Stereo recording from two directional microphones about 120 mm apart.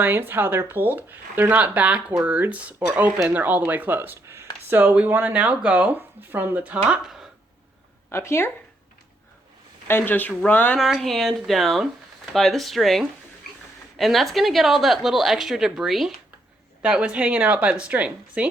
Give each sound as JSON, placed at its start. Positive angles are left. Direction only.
{"t": 0.0, "sound": "speech", "side_deg": -15}
{"t": 8.1, "sound": "speech", "side_deg": 20}
{"t": 9.8, "sound": "speech", "side_deg": 20}
{"t": 10.8, "sound": "speech", "side_deg": 0}